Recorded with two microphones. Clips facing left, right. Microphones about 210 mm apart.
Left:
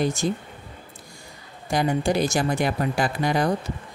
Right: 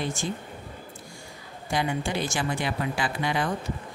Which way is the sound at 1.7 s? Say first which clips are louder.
Left 5 dB; 40° left (ahead or behind).